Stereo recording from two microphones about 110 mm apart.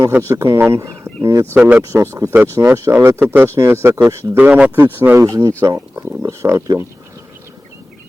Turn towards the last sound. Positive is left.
turn(degrees=-30)  # may be behind; listen again after turning